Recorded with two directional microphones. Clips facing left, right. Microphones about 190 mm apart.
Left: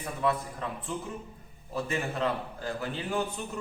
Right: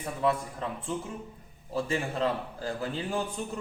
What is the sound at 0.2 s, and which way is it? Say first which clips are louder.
Speech: right 1 dB; 25° right (ahead or behind).